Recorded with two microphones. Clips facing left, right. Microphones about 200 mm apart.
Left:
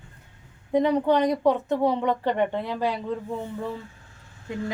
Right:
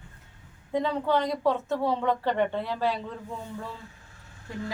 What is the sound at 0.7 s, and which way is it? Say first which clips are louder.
Speech: left 5 dB; 15° left (ahead or behind).